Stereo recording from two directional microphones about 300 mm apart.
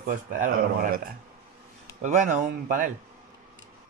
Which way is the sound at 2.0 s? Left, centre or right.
Right.